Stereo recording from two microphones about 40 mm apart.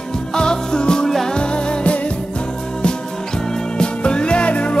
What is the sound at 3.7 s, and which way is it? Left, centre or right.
Music, left.